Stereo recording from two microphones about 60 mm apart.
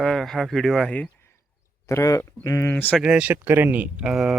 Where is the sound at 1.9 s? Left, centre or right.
Left.